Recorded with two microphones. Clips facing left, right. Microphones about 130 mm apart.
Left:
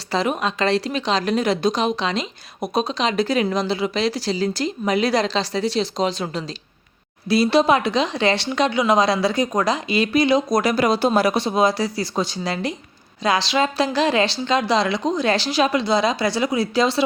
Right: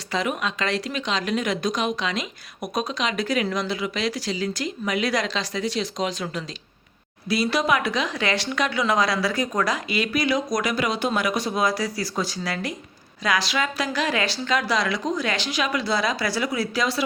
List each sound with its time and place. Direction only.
0.1 s speech: 35° left (ahead or behind)